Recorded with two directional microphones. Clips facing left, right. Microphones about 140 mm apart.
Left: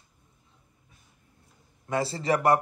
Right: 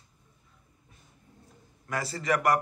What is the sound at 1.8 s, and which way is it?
Speech, 25° left (ahead or behind).